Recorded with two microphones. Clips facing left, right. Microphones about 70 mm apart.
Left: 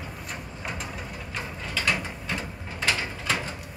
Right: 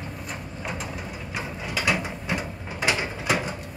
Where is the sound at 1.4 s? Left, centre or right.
Centre.